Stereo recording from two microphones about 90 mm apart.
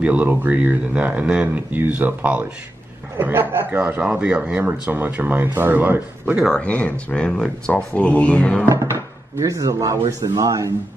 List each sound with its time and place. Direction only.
0.0 s speech: 20° right (ahead or behind)
3.7 s speech: 15° right (ahead or behind)
6.5 s speech: 15° left (ahead or behind)
8.6 s speech: 30° right (ahead or behind)